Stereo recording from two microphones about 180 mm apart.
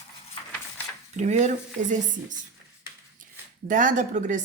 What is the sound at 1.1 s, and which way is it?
Speech, 40° right (ahead or behind).